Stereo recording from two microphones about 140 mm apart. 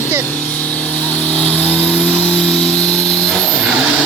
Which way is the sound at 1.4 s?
50° left (ahead or behind).